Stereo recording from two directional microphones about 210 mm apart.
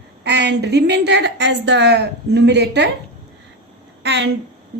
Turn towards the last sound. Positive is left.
turn(degrees=-55)  # may be behind; listen again after turning